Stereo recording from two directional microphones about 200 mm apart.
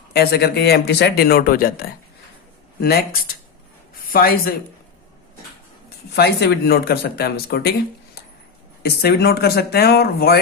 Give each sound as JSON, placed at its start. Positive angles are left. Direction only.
{"t": 0.1, "sound": "speech", "side_deg": 50}
{"t": 6.1, "sound": "speech", "side_deg": 55}